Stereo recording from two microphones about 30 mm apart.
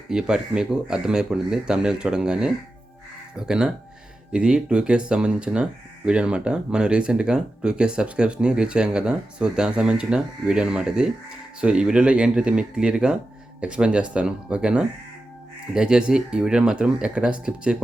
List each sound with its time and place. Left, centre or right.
0.1 s speech: right
12.0 s speech: right